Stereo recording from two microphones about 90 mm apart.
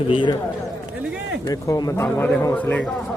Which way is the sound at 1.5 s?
45° left (ahead or behind).